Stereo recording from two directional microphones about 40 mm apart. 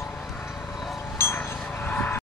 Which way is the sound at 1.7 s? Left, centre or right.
Left.